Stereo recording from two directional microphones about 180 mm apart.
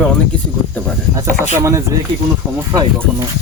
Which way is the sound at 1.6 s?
15° right (ahead or behind).